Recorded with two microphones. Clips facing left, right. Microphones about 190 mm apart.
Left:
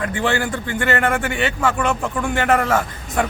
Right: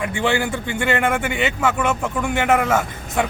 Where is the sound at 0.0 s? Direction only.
15° right (ahead or behind).